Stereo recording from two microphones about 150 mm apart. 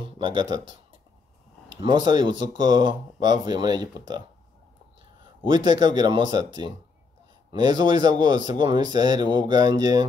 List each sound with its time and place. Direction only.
0.0 s speech: 30° right (ahead or behind)
1.8 s speech: 30° right (ahead or behind)
5.4 s speech: 30° right (ahead or behind)